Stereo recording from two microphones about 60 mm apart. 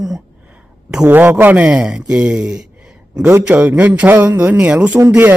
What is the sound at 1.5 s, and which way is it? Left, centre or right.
Speech, right.